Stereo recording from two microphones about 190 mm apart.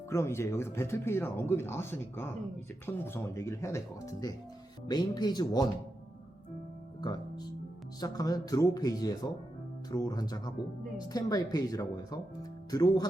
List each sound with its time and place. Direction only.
0.1 s speech: 15° left (ahead or behind)
7.0 s music: 20° left (ahead or behind)
8.0 s speech: 20° left (ahead or behind)